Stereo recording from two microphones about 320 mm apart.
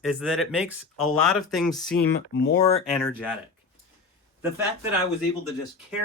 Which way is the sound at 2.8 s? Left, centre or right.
Centre.